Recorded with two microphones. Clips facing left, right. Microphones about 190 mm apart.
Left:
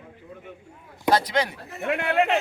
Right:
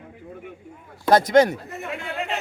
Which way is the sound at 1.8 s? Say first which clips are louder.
Left 9 dB; 65° left (ahead or behind).